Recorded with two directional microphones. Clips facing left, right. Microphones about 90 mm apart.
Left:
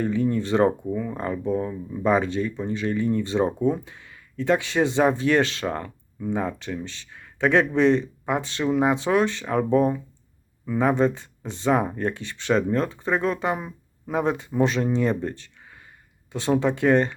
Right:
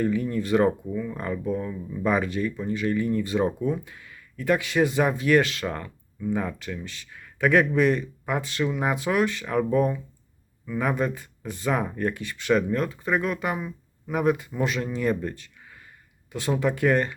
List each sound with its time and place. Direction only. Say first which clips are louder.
0.0 s speech: left 2 dB; 30° left (ahead or behind)